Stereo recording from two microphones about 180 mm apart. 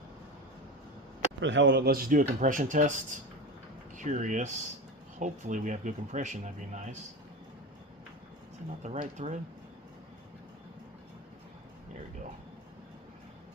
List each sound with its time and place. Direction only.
1.4 s speech: 90° right; by 6.9 s 40° right (ahead or behind)
8.8 s speech: 40° right (ahead or behind)